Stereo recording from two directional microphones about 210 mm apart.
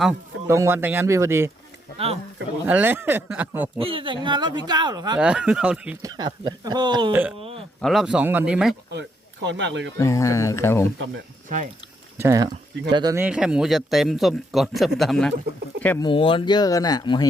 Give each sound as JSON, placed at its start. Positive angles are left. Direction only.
{"t": 0.0, "sound": "speech", "side_deg": -10}
{"t": 2.6, "sound": "speech", "side_deg": -10}
{"t": 3.8, "sound": "speech", "side_deg": -25}
{"t": 5.2, "sound": "speech", "side_deg": -5}
{"t": 6.0, "sound": "speech", "side_deg": -20}
{"t": 7.1, "sound": "speech", "side_deg": -10}
{"t": 7.3, "sound": "a sound", "side_deg": -25}
{"t": 7.8, "sound": "speech", "side_deg": 0}
{"t": 8.9, "sound": "speech", "side_deg": -55}
{"t": 10.0, "sound": "speech", "side_deg": 15}
{"t": 11.4, "sound": "speech", "side_deg": -40}
{"t": 12.2, "sound": "speech", "side_deg": -15}
{"t": 16.0, "sound": "speech", "side_deg": 25}